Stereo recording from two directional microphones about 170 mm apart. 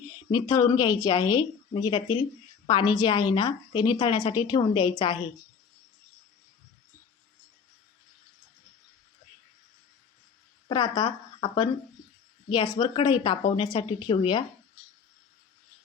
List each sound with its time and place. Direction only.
0.3 s a woman's voice: 20° left (ahead or behind)
10.7 s a woman's voice: 25° left (ahead or behind)